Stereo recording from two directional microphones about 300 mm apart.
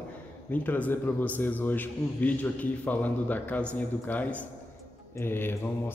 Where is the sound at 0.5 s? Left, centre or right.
Centre.